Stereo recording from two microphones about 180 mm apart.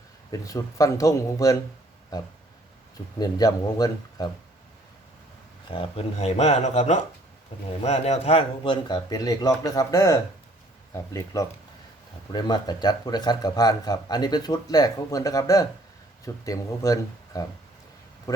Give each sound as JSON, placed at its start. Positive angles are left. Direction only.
{"t": 0.3, "sound": "speech", "side_deg": 20}
{"t": 5.6, "sound": "a man's voice", "side_deg": 30}